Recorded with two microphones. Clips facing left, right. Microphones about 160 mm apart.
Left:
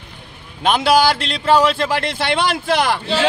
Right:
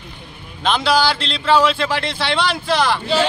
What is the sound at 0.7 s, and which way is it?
A man's voice, 50° left (ahead or behind).